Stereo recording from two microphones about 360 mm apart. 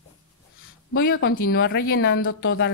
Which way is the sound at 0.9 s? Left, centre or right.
Left.